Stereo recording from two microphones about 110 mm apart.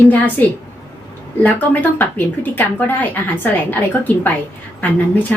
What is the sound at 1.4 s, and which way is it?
A woman's voice, 15° left (ahead or behind).